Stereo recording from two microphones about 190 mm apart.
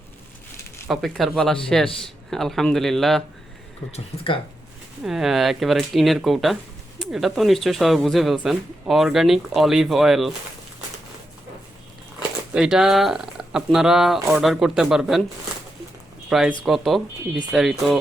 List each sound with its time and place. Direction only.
0.9 s speech: centre (ahead or behind)
3.9 s speech: 30° left (ahead or behind)
5.0 s speech: centre (ahead or behind)
12.5 s speech: centre (ahead or behind)
14.2 s speech: 15° right (ahead or behind)
14.4 s speech: centre (ahead or behind)
16.3 s speech: centre (ahead or behind)